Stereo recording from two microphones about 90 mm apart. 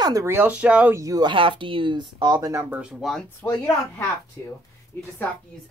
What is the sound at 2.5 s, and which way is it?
Speech, 25° right (ahead or behind).